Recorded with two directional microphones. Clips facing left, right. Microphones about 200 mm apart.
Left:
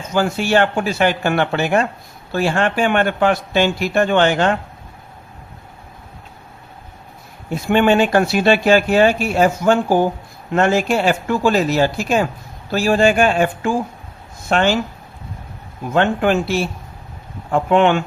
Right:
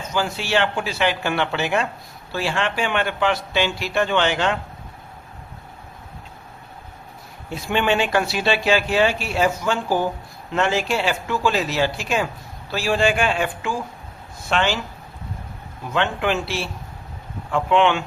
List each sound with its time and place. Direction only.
0.1 s speech: 50° left (ahead or behind)
7.5 s speech: 50° left (ahead or behind)
15.9 s speech: 45° left (ahead or behind)